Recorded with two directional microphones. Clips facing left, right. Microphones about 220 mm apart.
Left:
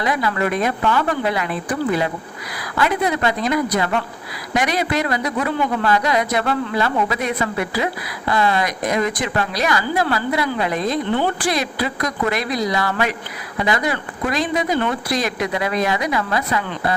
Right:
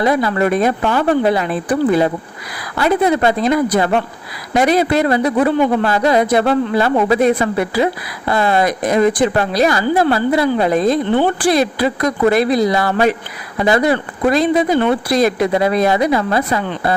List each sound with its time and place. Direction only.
0.0 s a woman's voice: 35° right (ahead or behind)